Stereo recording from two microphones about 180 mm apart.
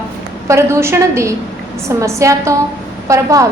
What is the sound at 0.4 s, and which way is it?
A woman's voice, 15° right (ahead or behind).